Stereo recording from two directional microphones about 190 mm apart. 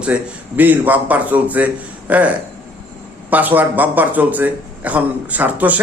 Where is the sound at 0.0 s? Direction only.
10° right (ahead or behind).